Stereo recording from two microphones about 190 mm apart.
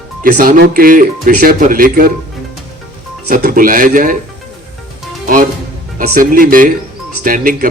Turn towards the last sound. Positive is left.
turn(degrees=-45)  # may be behind; listen again after turning